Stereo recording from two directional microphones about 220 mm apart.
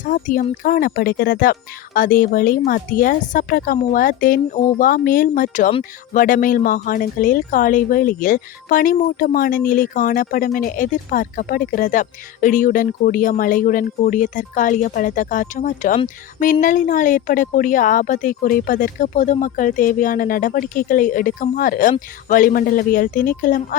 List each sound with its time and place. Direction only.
0.0 s speech: 35° left (ahead or behind)